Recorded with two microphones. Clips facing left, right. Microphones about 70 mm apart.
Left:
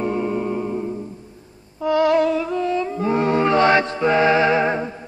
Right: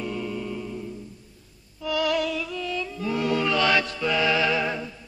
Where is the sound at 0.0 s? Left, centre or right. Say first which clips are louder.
Left 9 dB; left.